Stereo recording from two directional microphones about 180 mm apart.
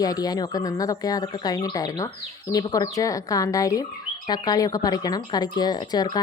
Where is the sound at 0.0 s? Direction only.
20° left (ahead or behind).